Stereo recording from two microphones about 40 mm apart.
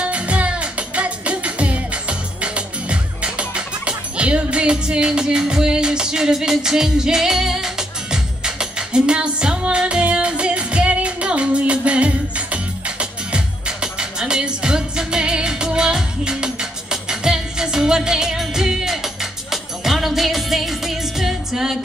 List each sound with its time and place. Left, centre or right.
0.0 s music: right; by 21.7 s centre